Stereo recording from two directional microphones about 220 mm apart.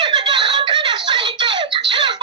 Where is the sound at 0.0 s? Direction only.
20° right (ahead or behind).